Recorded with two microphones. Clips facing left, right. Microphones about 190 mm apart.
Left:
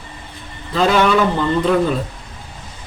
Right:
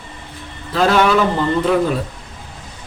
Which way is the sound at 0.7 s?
Centre (ahead or behind).